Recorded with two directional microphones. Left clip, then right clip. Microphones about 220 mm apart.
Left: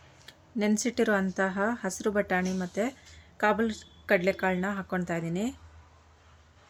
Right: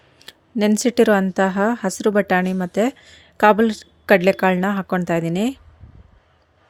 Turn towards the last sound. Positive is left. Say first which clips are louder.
# right 11 dB
turn(degrees=-45)  # may be behind; listen again after turning